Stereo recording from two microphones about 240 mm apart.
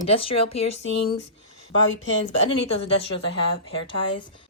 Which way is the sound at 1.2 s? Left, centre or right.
Left.